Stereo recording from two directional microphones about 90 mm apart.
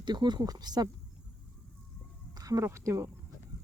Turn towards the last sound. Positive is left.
turn(degrees=-35)  # may be behind; listen again after turning